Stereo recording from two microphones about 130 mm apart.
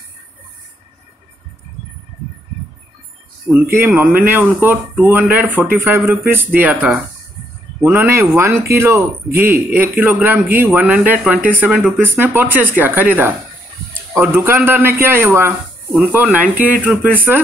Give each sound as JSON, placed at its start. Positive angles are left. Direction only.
{"t": 3.4, "sound": "speech", "side_deg": -15}